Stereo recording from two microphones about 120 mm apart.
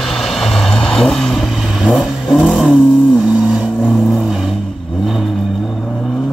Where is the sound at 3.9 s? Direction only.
Centre (ahead or behind).